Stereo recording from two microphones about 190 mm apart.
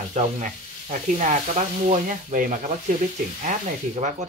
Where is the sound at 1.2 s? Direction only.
40° right (ahead or behind).